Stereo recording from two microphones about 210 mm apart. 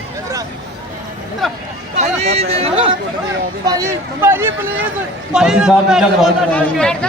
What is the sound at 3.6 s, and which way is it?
A man's voice, 15° right (ahead or behind).